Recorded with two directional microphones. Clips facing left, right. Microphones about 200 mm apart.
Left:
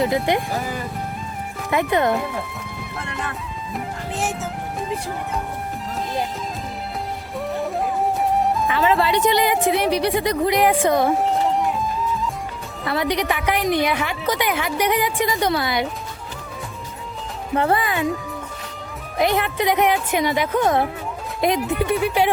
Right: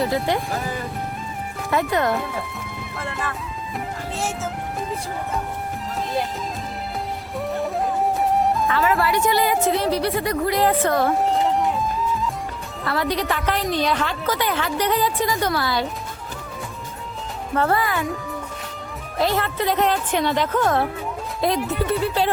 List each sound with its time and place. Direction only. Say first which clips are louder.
0.3 s speech: left 1 dB; centre (ahead or behind)
1.9 s speech: left 4 dB; 20° left (ahead or behind)
7.3 s music: even; centre (ahead or behind)
8.6 s a woman's voice: left 1 dB; 20° left (ahead or behind)
11.2 s music: even; centre (ahead or behind)
12.8 s a woman's voice: left 1 dB; 15° left (ahead or behind)
17.5 s speech: left 1 dB; 20° left (ahead or behind)
19.1 s a woman's voice: left 2 dB; 15° left (ahead or behind)